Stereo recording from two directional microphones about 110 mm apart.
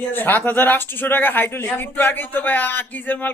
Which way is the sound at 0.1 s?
15° left (ahead or behind).